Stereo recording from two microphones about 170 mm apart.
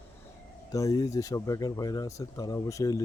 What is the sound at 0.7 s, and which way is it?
Speech, 20° left (ahead or behind).